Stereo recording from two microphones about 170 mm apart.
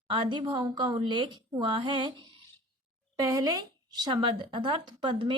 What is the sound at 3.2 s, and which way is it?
A woman's voice, 20° right (ahead or behind).